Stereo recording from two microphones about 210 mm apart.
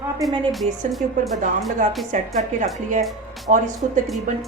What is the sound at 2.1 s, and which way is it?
A woman's voice, 35° right (ahead or behind).